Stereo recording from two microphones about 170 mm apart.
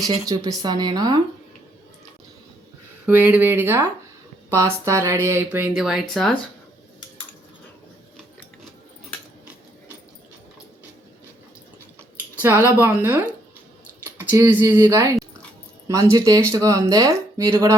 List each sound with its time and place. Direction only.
0.1 s speech: 20° right (ahead or behind)
3.1 s speech: 10° right (ahead or behind)
12.4 s speech: 15° right (ahead or behind)
14.3 s speech: 15° right (ahead or behind)